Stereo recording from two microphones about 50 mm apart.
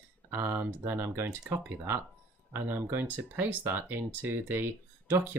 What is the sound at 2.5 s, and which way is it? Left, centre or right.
Speech, right.